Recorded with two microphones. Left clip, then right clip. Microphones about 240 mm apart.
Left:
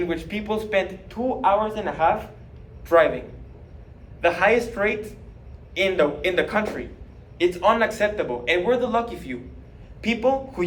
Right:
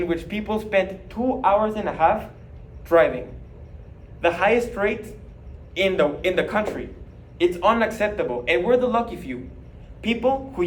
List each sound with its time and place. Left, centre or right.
0.0 s a man's voice: centre